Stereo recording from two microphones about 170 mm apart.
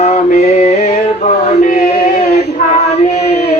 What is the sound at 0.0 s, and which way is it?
Mantra, 40° left (ahead or behind).